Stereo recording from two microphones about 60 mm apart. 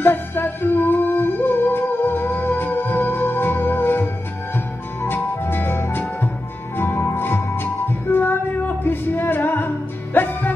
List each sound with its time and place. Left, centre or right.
0.0 s music: left